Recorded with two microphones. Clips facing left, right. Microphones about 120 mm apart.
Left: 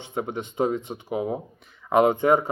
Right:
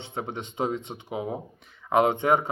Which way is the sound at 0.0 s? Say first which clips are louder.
Left 4 dB; 30° right (ahead or behind).